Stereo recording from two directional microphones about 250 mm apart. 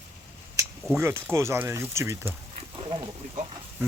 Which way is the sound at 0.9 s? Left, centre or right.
Centre.